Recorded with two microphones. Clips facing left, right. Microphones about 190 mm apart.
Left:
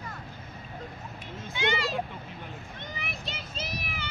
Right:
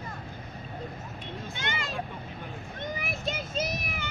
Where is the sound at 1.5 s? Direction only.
50° right (ahead or behind).